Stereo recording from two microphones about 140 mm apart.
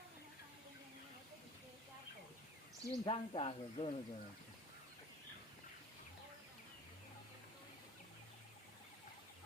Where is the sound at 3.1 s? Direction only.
40° left (ahead or behind).